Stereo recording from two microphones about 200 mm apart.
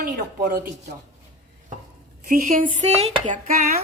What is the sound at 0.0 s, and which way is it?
Speech, 50° right (ahead or behind).